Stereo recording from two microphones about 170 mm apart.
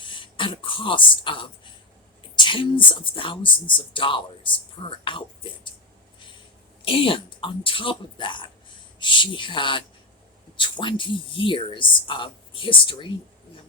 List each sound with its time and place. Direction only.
0.0 s speech: 30° left (ahead or behind)
6.8 s speech: 30° left (ahead or behind)